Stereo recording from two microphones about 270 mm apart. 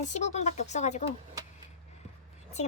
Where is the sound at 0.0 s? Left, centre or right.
Left.